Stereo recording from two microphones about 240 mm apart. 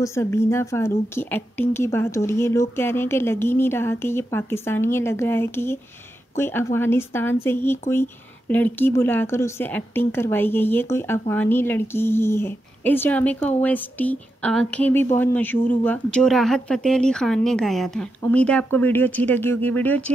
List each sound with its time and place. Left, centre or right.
0.0 s speech: centre